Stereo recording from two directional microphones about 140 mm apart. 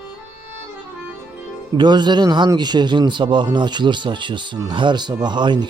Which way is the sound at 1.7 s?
30° right (ahead or behind).